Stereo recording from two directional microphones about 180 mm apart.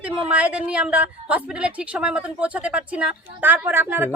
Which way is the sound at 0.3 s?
10° right (ahead or behind).